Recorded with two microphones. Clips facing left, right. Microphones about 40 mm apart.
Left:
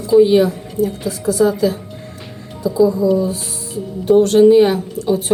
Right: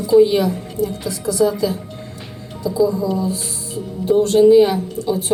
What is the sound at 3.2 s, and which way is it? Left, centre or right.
A woman's voice, left.